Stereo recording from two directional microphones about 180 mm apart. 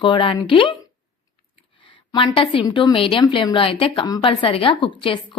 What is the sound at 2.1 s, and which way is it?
A woman's voice, 30° left (ahead or behind).